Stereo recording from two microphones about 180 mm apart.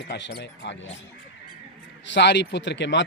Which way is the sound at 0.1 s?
70° left (ahead or behind).